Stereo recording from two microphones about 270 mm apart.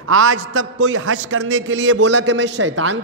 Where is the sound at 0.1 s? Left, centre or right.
Right.